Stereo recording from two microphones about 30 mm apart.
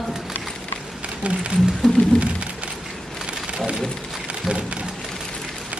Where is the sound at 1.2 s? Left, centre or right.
Right.